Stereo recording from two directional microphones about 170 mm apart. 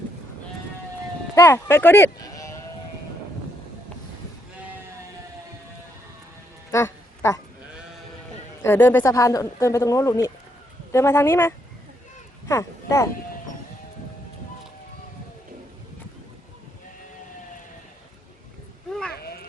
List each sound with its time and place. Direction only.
1.4 s speech: 15° left (ahead or behind)
6.7 s music: 15° left (ahead or behind)
8.6 s speech: 15° left (ahead or behind)
19.1 s a sound: 65° left (ahead or behind)